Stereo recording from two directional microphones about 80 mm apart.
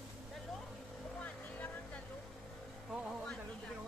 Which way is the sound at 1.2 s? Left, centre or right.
Centre.